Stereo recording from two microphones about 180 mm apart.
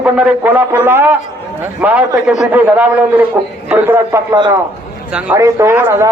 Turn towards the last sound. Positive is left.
turn(degrees=-15)  # may be behind; listen again after turning